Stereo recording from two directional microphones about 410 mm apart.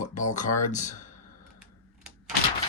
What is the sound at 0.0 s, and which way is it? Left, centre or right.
Speech, centre.